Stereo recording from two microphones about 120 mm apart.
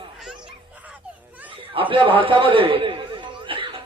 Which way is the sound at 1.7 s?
45° right (ahead or behind).